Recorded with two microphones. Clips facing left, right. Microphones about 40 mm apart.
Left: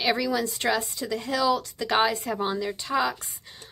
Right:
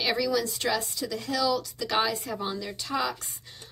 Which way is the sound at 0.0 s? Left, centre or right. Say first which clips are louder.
Left 1 dB; centre.